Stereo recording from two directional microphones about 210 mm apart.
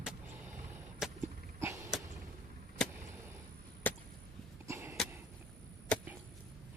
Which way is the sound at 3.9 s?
5° left (ahead or behind).